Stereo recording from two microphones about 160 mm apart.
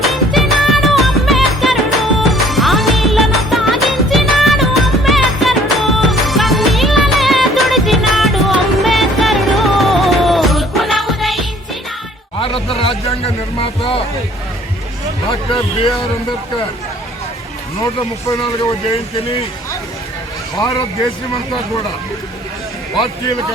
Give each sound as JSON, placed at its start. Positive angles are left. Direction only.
{"t": 0.0, "sound": "music", "side_deg": 0}
{"t": 12.4, "sound": "music", "side_deg": 35}
{"t": 15.3, "sound": "a sound", "side_deg": 35}
{"t": 20.6, "sound": "a man's voice", "side_deg": 20}